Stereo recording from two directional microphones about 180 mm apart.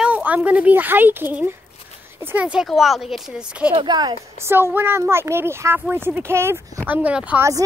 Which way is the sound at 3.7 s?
25° right (ahead or behind).